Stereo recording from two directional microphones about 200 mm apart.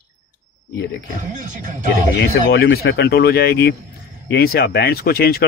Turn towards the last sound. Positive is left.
turn(degrees=50)  # may be behind; listen again after turning